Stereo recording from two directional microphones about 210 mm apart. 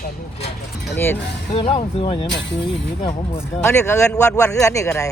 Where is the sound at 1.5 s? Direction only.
30° left (ahead or behind).